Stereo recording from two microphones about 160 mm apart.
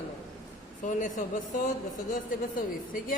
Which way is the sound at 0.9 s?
50° left (ahead or behind).